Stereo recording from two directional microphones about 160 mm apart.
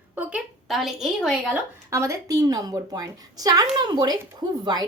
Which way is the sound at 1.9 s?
20° right (ahead or behind).